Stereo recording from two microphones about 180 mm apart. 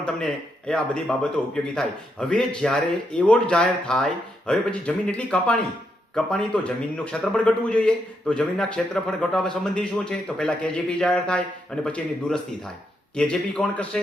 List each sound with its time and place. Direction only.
0.7 s a man's voice: 5° left (ahead or behind)